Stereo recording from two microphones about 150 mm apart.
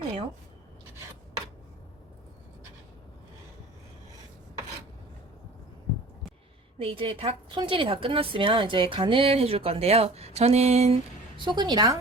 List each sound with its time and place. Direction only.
6.7 s a woman's voice: 35° right (ahead or behind)
11.3 s a woman's voice: 30° right (ahead or behind)